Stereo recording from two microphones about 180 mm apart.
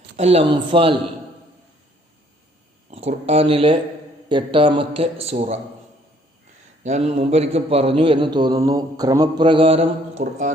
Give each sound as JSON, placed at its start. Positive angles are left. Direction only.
{"t": 0.2, "sound": "a man's voice", "side_deg": -35}
{"t": 2.9, "sound": "a man's voice", "side_deg": -35}
{"t": 6.8, "sound": "a man's voice", "side_deg": -35}